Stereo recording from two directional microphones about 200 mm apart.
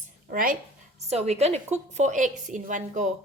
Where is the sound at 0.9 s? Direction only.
35° right (ahead or behind).